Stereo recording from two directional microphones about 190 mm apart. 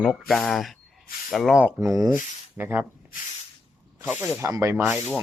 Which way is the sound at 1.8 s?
20° right (ahead or behind).